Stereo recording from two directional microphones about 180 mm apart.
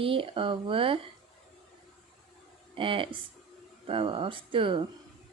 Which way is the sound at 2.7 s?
30° right (ahead or behind).